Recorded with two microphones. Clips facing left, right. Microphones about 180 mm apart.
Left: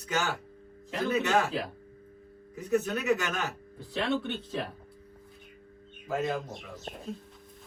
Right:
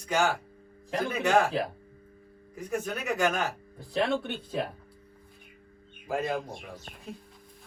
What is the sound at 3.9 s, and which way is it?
Speech, 50° right (ahead or behind).